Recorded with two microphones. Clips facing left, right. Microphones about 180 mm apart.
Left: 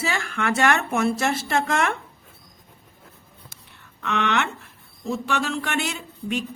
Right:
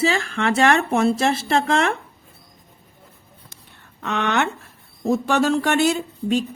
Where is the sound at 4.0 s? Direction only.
40° right (ahead or behind).